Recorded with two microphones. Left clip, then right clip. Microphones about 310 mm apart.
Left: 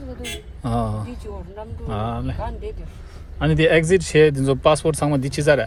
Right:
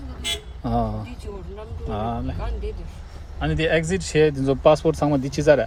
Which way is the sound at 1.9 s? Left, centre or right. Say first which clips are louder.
Even; left.